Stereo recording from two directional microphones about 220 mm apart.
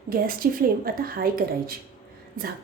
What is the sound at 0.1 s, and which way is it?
A woman's voice, 40° right (ahead or behind).